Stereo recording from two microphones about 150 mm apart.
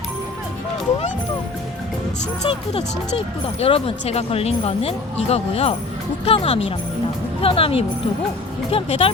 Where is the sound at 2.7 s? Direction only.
40° left (ahead or behind).